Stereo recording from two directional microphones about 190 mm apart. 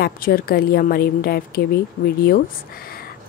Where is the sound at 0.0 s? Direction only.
50° left (ahead or behind).